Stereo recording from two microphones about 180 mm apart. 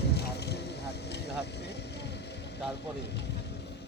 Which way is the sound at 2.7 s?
70° left (ahead or behind).